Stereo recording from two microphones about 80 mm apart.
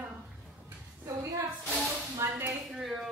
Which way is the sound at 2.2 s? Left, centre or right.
Right.